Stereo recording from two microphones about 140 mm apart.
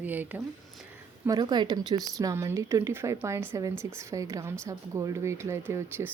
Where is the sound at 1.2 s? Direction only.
30° right (ahead or behind).